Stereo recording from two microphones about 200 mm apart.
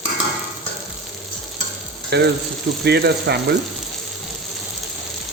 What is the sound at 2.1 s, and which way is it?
Speech, 55° right (ahead or behind).